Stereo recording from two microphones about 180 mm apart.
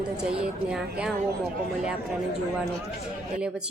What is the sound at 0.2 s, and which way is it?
Speech, 5° right (ahead or behind).